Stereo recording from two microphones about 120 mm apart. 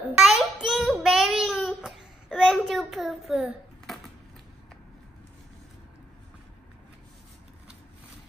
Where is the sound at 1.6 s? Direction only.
5° right (ahead or behind).